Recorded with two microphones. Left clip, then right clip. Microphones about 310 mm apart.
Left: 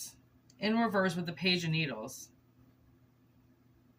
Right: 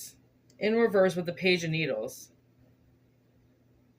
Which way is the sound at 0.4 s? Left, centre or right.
Centre.